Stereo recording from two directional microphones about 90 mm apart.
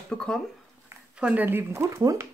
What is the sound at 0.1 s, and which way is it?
Speech, 10° left (ahead or behind).